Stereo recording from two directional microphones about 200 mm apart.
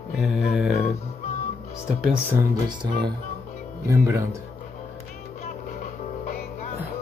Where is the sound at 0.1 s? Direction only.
Centre (ahead or behind).